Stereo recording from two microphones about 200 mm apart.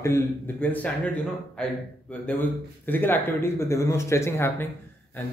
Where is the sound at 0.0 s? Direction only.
10° left (ahead or behind).